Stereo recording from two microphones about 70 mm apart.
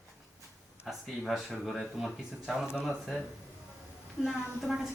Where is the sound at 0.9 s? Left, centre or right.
Centre.